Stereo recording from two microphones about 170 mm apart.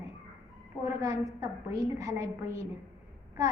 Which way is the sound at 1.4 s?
20° right (ahead or behind).